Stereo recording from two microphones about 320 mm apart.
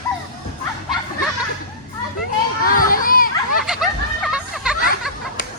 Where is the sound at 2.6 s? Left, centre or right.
Left.